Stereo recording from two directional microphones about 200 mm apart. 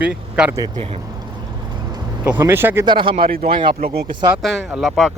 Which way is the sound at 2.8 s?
25° right (ahead or behind).